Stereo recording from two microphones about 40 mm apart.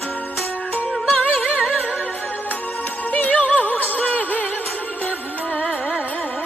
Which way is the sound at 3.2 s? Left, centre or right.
Left.